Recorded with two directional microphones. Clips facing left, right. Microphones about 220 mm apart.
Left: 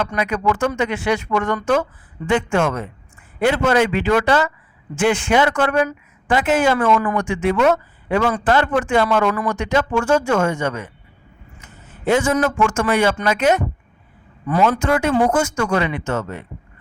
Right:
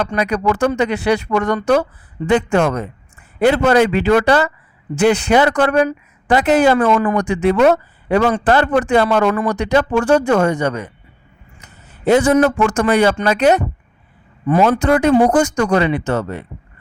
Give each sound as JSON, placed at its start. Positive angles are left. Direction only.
{"t": 0.0, "sound": "a man's voice", "side_deg": -35}